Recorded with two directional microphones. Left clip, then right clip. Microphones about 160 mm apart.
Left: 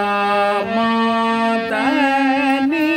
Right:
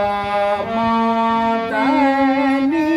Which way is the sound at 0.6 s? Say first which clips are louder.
Even; 20° left (ahead or behind).